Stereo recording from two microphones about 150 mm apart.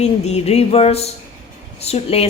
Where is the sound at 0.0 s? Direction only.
45° left (ahead or behind).